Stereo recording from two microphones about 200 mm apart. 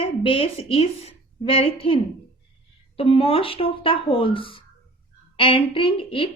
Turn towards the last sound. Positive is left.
turn(degrees=25)  # may be behind; listen again after turning